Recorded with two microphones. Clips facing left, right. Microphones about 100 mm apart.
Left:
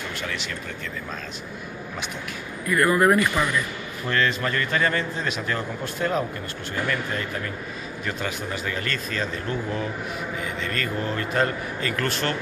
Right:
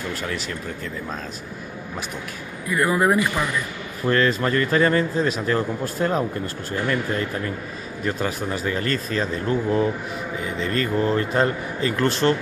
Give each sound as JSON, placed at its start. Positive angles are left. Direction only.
{"t": 0.2, "sound": "a man's voice", "side_deg": -35}
{"t": 2.7, "sound": "a man's voice", "side_deg": -15}
{"t": 4.1, "sound": "a man's voice", "side_deg": -35}
{"t": 8.0, "sound": "a man's voice", "side_deg": -35}